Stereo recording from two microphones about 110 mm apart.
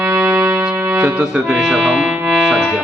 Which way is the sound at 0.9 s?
10° right (ahead or behind).